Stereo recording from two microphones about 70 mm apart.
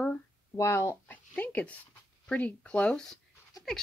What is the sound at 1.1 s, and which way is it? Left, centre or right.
Speech, left.